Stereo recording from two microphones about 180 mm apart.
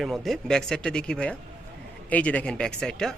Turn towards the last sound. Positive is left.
turn(degrees=5)  # may be behind; listen again after turning